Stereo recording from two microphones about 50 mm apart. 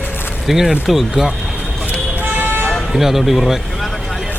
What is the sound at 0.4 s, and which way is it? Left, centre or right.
Speech, centre.